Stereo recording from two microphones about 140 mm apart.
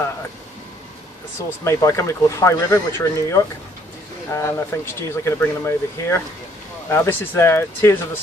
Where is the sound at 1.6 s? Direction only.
20° left (ahead or behind).